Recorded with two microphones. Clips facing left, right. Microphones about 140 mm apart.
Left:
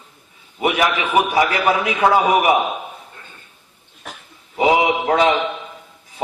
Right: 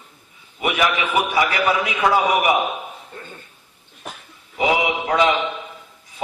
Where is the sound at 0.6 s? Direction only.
40° left (ahead or behind).